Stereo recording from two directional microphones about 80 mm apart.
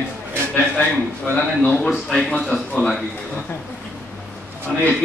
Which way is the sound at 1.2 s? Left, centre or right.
Left.